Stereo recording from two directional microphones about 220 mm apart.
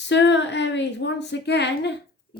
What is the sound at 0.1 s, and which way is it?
Speech, 55° left (ahead or behind).